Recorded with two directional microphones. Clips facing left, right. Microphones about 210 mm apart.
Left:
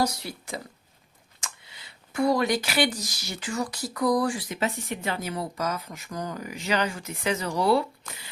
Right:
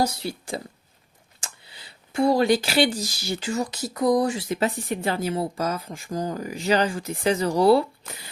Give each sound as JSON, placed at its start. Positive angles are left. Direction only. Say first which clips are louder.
{"t": 0.0, "sound": "a woman's voice", "louder": "right 2 dB", "side_deg": -25}